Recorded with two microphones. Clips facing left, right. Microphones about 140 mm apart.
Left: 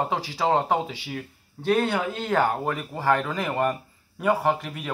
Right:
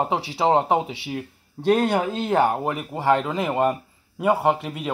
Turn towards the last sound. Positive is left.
turn(degrees=-20)  # may be behind; listen again after turning